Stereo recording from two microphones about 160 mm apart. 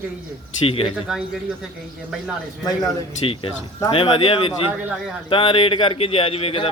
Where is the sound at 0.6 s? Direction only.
35° left (ahead or behind).